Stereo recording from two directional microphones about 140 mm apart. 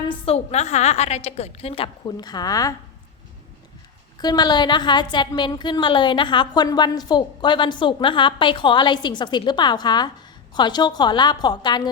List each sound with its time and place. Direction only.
0.1 s a woman's voice: 45° left (ahead or behind)
2.0 s a woman's voice: 30° left (ahead or behind)
4.2 s a woman's voice: 30° left (ahead or behind)